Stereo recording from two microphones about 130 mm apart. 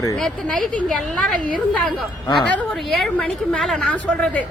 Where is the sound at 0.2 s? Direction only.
5° left (ahead or behind).